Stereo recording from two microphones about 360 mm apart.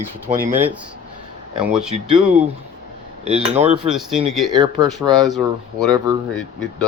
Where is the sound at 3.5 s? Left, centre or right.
Centre.